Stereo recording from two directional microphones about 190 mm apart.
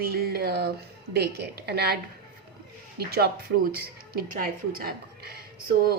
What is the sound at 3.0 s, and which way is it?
Speech, 55° right (ahead or behind).